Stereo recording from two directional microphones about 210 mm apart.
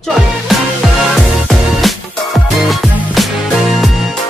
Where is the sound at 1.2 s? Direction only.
Centre (ahead or behind).